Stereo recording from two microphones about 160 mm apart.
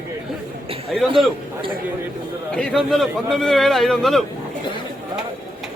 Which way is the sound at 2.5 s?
5° left (ahead or behind).